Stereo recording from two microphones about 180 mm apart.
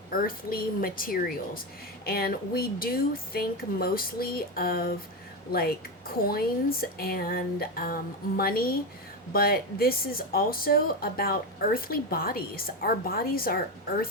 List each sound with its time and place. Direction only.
0.1 s speech: 50° left (ahead or behind)